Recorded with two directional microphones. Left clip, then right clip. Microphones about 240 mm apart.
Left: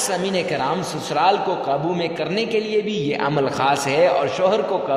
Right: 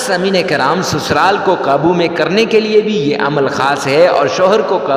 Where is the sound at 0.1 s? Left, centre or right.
Right.